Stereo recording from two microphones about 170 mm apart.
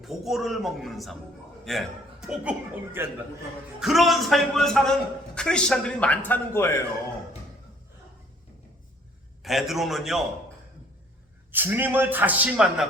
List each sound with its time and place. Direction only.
0.0 s a man's voice: centre (ahead or behind)
9.4 s a man's voice: centre (ahead or behind)
11.5 s a man's voice: 10° right (ahead or behind)